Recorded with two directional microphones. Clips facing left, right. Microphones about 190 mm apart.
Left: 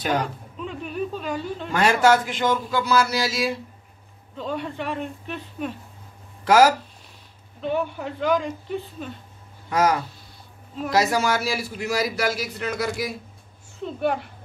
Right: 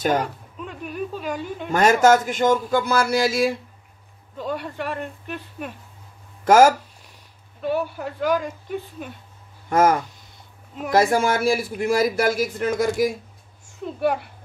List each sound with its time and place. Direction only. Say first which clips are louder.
0.6 s a sound: left 1 dB; 5° right (ahead or behind)
1.7 s a man's voice: right 3 dB; 45° right (ahead or behind)
4.4 s speech: right 1 dB; 10° right (ahead or behind)
6.4 s speech: right 2 dB; 45° right (ahead or behind)
7.6 s a woman's voice: right 1 dB; 10° right (ahead or behind)
9.7 s a man's voice: right 3 dB; 50° right (ahead or behind)
13.8 s a woman's voice: right 2 dB; 10° right (ahead or behind)